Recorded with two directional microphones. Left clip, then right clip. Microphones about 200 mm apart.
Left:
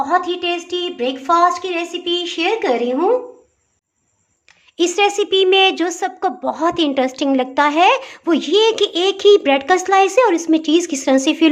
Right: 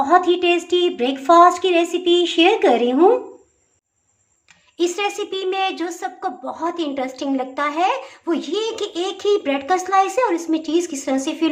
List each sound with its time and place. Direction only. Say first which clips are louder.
0.0 s speech: right 2 dB; 15° right (ahead or behind)
4.8 s a woman's voice: left 6 dB; 35° left (ahead or behind)